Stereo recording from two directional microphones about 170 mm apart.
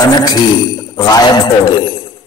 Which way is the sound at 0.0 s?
25° left (ahead or behind).